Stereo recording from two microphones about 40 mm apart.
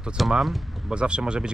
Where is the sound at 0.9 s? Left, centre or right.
Right.